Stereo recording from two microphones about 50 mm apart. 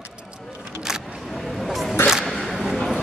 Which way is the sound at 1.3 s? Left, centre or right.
Centre.